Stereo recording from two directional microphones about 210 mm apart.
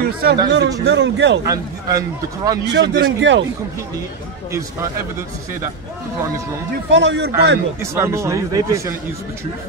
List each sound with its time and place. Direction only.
0.0 s a man's voice: 50° right (ahead or behind)
1.4 s speech: 15° right (ahead or behind)
2.6 s a man's voice: 55° right (ahead or behind)
6.9 s a man's voice: 55° right (ahead or behind)
7.8 s speech: 15° right (ahead or behind)